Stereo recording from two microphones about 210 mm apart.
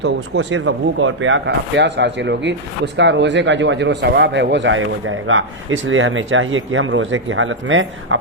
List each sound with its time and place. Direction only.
0.0 s speech: 60° right (ahead or behind)